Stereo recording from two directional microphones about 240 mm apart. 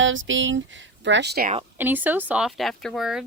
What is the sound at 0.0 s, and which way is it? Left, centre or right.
Speech, right.